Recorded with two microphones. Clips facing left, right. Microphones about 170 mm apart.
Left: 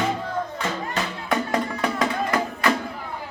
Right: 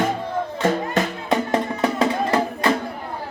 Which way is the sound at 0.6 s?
45° right (ahead or behind).